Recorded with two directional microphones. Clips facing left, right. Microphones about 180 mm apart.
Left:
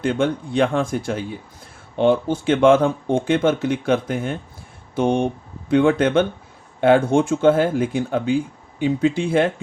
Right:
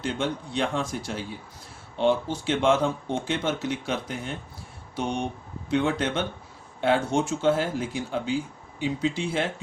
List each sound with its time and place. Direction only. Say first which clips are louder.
0.0 s speech: left 8 dB; 55° left (ahead or behind)